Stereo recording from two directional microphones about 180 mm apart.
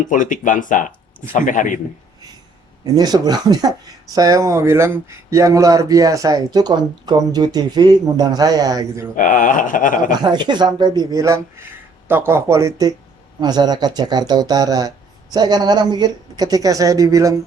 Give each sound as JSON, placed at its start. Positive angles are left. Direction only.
{"t": 0.0, "sound": "speech", "side_deg": 45}
{"t": 2.8, "sound": "speech", "side_deg": -20}
{"t": 9.1, "sound": "speech", "side_deg": 45}
{"t": 10.2, "sound": "speech", "side_deg": -25}